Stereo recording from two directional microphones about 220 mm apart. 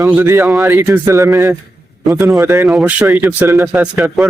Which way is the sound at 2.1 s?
Centre (ahead or behind).